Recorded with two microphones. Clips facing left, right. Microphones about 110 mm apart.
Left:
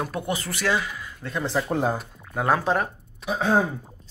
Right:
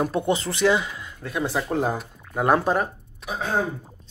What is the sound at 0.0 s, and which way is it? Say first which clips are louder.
Speech: right 5 dB; 25° right (ahead or behind).